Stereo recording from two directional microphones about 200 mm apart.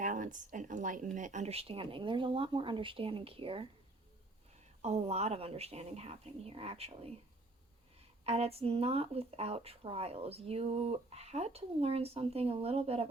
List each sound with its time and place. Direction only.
0.0 s speech: 40° right (ahead or behind)
4.8 s a woman's voice: 35° right (ahead or behind)
8.2 s speech: 30° right (ahead or behind)